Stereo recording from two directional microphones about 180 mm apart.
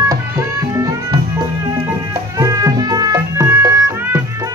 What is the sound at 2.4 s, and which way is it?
Music, 20° right (ahead or behind).